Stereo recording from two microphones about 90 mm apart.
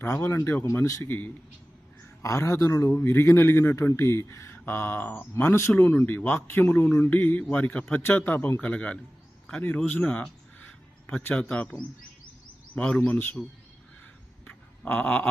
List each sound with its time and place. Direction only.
0.0 s a man's voice: 25° left (ahead or behind)
5.7 s a man's voice: 20° left (ahead or behind)
12.7 s a man's voice: 15° left (ahead or behind)
14.4 s a sound: 20° left (ahead or behind)